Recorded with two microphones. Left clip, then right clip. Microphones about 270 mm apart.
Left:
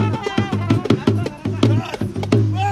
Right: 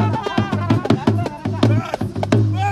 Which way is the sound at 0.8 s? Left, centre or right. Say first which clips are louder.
Left 1 dB; right.